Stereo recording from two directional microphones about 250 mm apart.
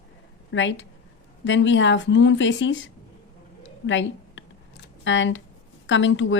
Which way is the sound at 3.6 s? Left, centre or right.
Left.